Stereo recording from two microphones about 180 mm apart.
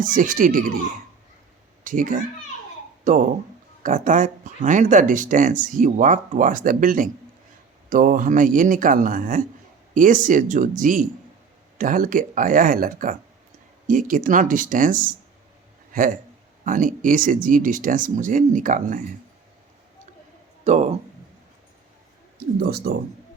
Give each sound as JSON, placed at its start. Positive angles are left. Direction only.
{"t": 0.0, "sound": "speech", "side_deg": -45}
{"t": 1.8, "sound": "speech", "side_deg": -45}
{"t": 20.7, "sound": "a man's voice", "side_deg": -40}
{"t": 22.6, "sound": "speech", "side_deg": -60}